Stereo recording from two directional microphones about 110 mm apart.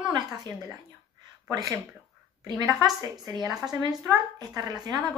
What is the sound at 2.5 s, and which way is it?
Speech, 35° right (ahead or behind).